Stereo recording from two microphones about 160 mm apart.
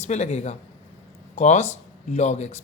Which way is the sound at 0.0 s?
45° left (ahead or behind).